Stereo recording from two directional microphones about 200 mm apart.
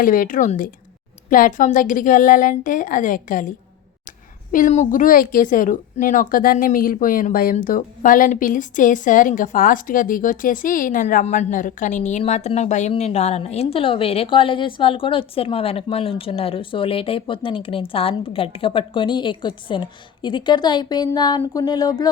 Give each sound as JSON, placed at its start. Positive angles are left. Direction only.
{"t": 0.0, "sound": "a woman's voice", "side_deg": 45}
{"t": 4.5, "sound": "a woman's voice", "side_deg": 40}